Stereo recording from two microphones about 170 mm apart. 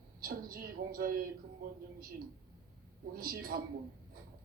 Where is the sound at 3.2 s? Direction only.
60° right (ahead or behind).